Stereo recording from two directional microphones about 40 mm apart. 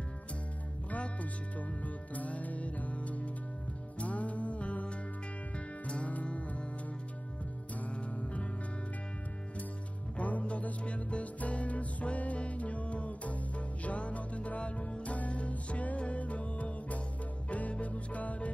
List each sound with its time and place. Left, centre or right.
0.8 s music: left
7.8 s music: left
10.1 s music: left